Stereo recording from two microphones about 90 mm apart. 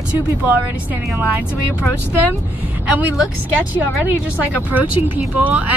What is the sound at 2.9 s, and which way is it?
Speech, 20° right (ahead or behind).